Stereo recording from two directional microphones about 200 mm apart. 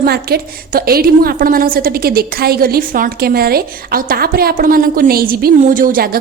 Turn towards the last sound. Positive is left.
turn(degrees=-45)  # may be behind; listen again after turning